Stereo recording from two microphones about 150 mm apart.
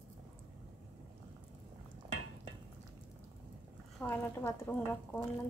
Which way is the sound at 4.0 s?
15° left (ahead or behind).